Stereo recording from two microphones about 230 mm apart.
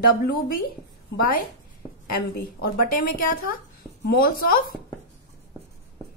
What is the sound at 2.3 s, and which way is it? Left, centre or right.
A woman's voice, left.